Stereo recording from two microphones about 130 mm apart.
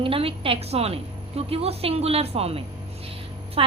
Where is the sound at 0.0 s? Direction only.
45° right (ahead or behind).